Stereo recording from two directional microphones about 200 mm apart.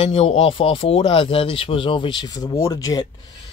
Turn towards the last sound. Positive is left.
turn(degrees=20)  # may be behind; listen again after turning